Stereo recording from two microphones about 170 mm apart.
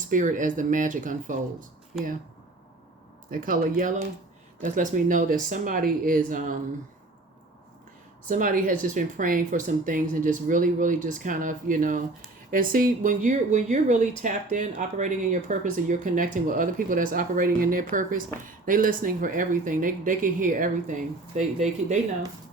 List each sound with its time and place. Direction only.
0.1 s speech: 50° right (ahead or behind)
3.2 s speech: 55° right (ahead or behind)
8.3 s speech: 55° right (ahead or behind)